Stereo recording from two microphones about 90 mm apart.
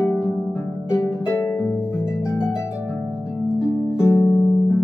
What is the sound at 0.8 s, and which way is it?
Harp, 30° left (ahead or behind).